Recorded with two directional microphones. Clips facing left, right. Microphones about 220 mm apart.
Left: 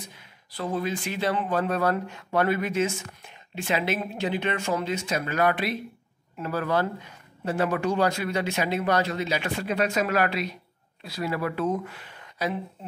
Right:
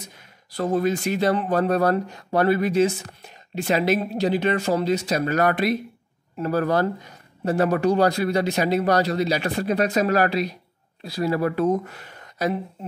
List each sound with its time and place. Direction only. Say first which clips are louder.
0.0 s speech: right 1 dB; 45° right (ahead or behind)